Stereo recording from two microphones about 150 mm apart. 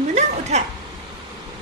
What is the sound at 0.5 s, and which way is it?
Speech, 45° right (ahead or behind).